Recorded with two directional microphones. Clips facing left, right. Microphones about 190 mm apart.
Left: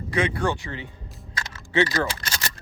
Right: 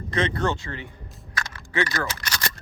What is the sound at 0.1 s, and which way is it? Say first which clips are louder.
Speech: even; 10° left (ahead or behind).